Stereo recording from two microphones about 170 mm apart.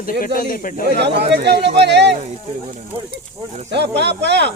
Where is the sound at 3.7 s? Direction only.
90° right.